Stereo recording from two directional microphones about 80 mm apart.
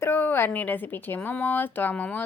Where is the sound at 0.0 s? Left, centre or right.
Left.